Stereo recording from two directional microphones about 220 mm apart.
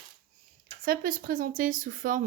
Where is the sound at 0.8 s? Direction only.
40° right (ahead or behind).